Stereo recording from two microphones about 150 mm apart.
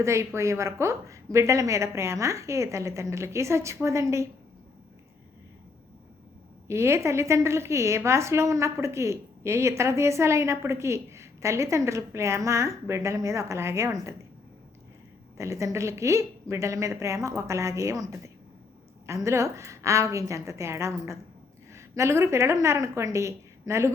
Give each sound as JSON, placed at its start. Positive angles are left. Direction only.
{"t": 0.0, "sound": "a woman's voice", "side_deg": -20}
{"t": 6.7, "sound": "a woman's voice", "side_deg": -20}
{"t": 15.4, "sound": "a woman's voice", "side_deg": -20}